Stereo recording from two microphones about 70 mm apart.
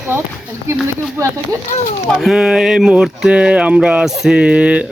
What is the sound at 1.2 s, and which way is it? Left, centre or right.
Speech, right.